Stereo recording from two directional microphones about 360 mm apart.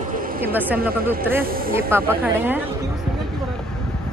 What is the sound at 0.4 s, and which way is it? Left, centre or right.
Speech, centre.